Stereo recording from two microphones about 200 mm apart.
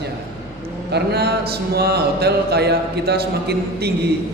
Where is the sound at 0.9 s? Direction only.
55° right (ahead or behind).